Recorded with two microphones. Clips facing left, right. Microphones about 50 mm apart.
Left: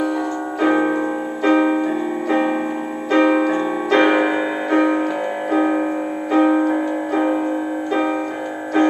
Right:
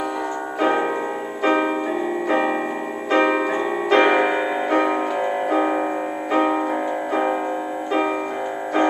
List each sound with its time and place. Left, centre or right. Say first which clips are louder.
0.6 s piano: left 3 dB; centre
1.4 s music: left 4 dB; centre
2.2 s piano: left 2 dB; centre
3.1 s music: left 3 dB; centre